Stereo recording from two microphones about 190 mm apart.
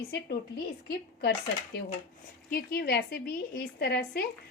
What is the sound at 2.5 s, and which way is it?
Speech, 55° left (ahead or behind).